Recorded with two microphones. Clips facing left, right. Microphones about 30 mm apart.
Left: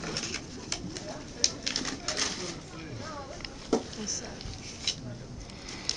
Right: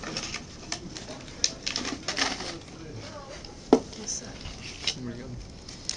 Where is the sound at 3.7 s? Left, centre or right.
Right.